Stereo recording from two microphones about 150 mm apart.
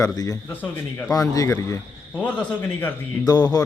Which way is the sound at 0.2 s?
25° left (ahead or behind).